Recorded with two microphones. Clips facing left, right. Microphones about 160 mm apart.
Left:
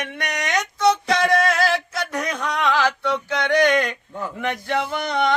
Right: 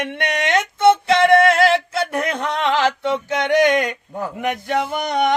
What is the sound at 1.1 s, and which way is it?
Music, 55° right (ahead or behind).